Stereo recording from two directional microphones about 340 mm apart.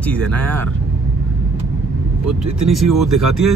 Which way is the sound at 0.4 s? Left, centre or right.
Centre.